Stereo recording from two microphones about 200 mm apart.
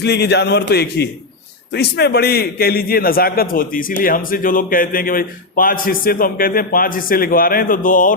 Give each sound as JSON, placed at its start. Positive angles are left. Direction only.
{"t": 0.0, "sound": "a man's voice", "side_deg": 55}